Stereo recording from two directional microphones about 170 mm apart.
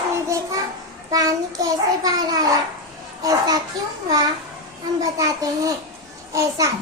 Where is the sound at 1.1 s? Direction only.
20° right (ahead or behind).